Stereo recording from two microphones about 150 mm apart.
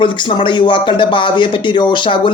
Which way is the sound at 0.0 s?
35° left (ahead or behind).